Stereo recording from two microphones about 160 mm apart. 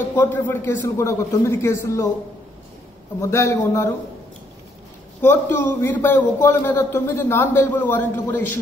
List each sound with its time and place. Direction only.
0.1 s a man's voice: 15° left (ahead or behind)
3.2 s a man's voice: 15° left (ahead or behind)
5.2 s a man's voice: 15° left (ahead or behind)